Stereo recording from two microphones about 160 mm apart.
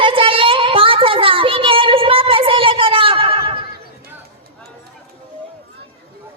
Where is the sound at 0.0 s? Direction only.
35° right (ahead or behind).